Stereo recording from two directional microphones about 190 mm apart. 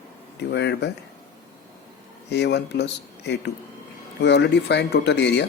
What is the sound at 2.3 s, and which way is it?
Speech, 60° left (ahead or behind).